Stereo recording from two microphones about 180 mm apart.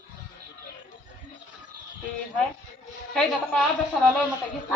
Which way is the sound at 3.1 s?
5° left (ahead or behind).